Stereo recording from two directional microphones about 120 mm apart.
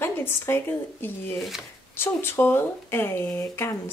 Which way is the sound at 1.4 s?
5° right (ahead or behind).